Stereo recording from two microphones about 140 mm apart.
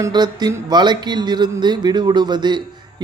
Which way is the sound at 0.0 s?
30° right (ahead or behind).